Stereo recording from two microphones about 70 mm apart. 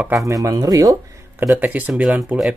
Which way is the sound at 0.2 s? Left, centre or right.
Right.